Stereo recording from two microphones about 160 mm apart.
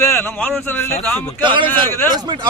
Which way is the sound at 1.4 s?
30° right (ahead or behind).